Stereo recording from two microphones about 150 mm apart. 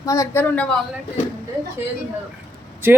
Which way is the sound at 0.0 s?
20° left (ahead or behind).